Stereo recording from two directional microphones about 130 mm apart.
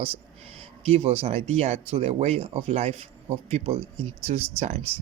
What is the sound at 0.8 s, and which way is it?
Speech, 50° right (ahead or behind).